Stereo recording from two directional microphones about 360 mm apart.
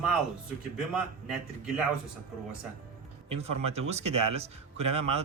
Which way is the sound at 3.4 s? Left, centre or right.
Centre.